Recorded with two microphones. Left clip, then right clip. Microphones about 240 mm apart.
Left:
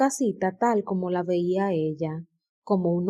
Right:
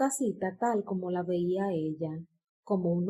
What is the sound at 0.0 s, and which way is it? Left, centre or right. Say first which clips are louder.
Speech: left 6 dB; left.